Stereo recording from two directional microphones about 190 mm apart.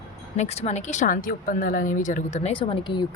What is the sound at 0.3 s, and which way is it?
Speech, 35° left (ahead or behind).